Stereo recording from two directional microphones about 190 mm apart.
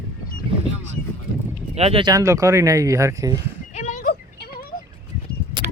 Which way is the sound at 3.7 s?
40° left (ahead or behind).